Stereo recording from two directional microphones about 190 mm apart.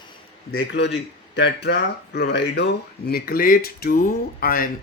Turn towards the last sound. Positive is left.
turn(degrees=50)  # may be behind; listen again after turning